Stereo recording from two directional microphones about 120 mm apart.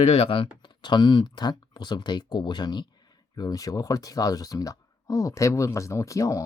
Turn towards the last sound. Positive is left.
turn(degrees=25)  # may be behind; listen again after turning